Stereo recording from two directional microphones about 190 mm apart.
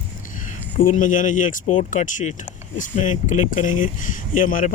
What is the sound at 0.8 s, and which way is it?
Speech, 45° left (ahead or behind).